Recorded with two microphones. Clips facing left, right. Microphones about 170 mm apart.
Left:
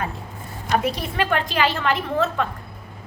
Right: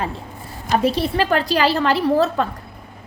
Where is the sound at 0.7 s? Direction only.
30° right (ahead or behind).